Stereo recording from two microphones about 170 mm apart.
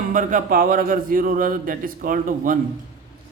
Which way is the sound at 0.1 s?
50° right (ahead or behind).